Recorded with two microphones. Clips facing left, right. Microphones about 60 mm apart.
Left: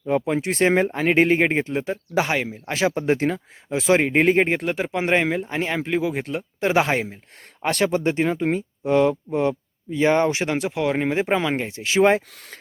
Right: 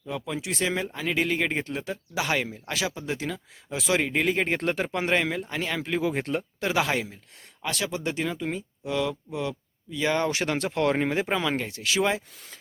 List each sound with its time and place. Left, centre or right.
0.1 s speech: left
2.8 s speech: left
4.5 s speech: centre
5.0 s speech: left
6.0 s speech: centre
6.6 s speech: left
7.6 s speech: left; by 11.1 s centre
11.1 s speech: left
12.3 s speech: left